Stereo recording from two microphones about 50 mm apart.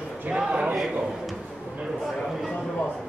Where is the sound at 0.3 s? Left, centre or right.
Centre.